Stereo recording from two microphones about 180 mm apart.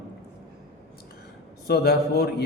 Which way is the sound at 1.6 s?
60° left (ahead or behind).